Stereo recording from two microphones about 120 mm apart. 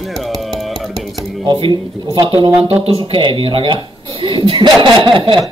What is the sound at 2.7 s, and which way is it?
Speech, 55° right (ahead or behind).